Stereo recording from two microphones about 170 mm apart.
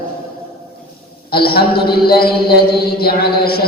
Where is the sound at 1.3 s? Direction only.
65° left (ahead or behind).